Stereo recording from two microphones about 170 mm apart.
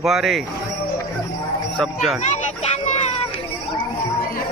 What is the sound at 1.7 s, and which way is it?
Speech, centre (ahead or behind).